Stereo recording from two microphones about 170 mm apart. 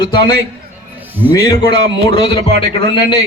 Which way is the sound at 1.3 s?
25° left (ahead or behind).